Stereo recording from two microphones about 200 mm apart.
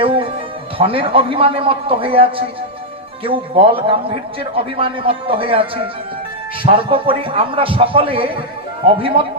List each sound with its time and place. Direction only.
0.0 s music: 25° right (ahead or behind)
0.8 s a man's voice: 25° right (ahead or behind)